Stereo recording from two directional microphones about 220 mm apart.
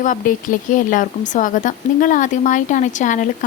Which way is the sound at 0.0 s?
35° left (ahead or behind).